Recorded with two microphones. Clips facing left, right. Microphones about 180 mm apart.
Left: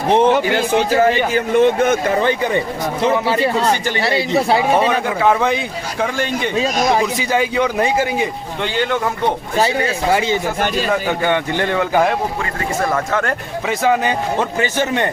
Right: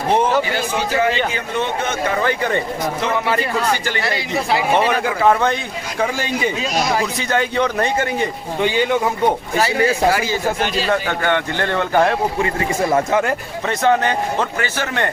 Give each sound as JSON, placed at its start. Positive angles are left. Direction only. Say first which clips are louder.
{"t": 0.1, "sound": "speech", "louder": "left 4 dB", "side_deg": 20}
{"t": 1.3, "sound": "a man's voice", "louder": "left 9 dB", "side_deg": 50}
{"t": 2.2, "sound": "a man's voice", "louder": "left 2 dB", "side_deg": 15}
{"t": 3.1, "sound": "speech", "louder": "left 5 dB", "side_deg": 25}
{"t": 5.0, "sound": "speech", "louder": "even", "side_deg": 0}
{"t": 7.2, "sound": "a man's voice", "louder": "left 2 dB", "side_deg": 5}
{"t": 8.6, "sound": "speech", "louder": "right 2 dB", "side_deg": -10}
{"t": 9.6, "sound": "speech", "louder": "even", "side_deg": 25}
{"t": 11.2, "sound": "a man's voice", "louder": "left 2 dB", "side_deg": 15}
{"t": 12.4, "sound": "a man's voice", "louder": "right 2 dB", "side_deg": -20}
{"t": 13.7, "sound": "a man's voice", "louder": "even", "side_deg": 5}
{"t": 14.3, "sound": "a man's voice", "louder": "left 3 dB", "side_deg": 20}